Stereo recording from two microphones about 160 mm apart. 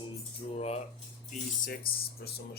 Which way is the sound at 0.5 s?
40° left (ahead or behind).